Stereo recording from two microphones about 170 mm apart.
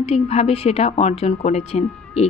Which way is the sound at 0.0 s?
35° left (ahead or behind).